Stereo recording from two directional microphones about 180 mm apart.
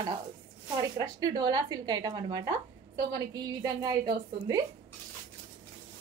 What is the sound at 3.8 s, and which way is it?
Speech, 20° right (ahead or behind).